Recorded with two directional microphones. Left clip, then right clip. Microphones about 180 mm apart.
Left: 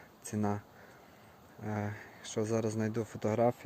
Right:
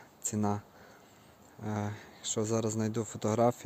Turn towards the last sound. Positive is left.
turn(degrees=-25)  # may be behind; listen again after turning